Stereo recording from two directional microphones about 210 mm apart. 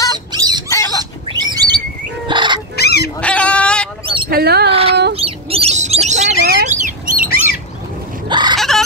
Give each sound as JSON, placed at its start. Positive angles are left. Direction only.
{"t": 0.3, "sound": "a sound", "side_deg": -20}
{"t": 0.7, "sound": "pig", "side_deg": 15}
{"t": 1.3, "sound": "bird", "side_deg": -20}
{"t": 2.2, "sound": "pig", "side_deg": -20}
{"t": 2.7, "sound": "fowl", "side_deg": 50}
{"t": 3.2, "sound": "goat", "side_deg": 5}
{"t": 4.3, "sound": "speech", "side_deg": -50}
{"t": 4.6, "sound": "a sound", "side_deg": -25}
{"t": 5.1, "sound": "bird", "side_deg": -25}
{"t": 8.3, "sound": "chicken", "side_deg": -20}
{"t": 8.5, "sound": "chicken", "side_deg": 0}